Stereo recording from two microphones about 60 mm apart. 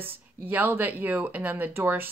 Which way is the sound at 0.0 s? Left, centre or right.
Right.